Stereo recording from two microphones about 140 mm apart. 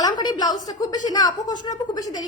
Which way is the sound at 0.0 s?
30° left (ahead or behind).